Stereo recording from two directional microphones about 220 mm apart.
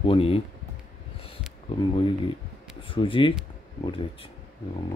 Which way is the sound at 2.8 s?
25° left (ahead or behind).